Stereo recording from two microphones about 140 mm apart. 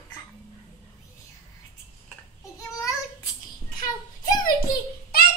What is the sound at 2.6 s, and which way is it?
Babbling, 25° left (ahead or behind).